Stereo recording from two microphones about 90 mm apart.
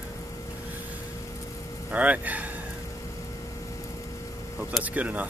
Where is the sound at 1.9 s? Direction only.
15° right (ahead or behind).